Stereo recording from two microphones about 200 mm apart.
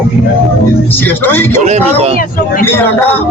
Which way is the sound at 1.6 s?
35° right (ahead or behind).